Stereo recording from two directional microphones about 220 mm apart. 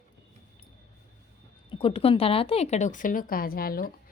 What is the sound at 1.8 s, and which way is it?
A woman's voice, 25° left (ahead or behind).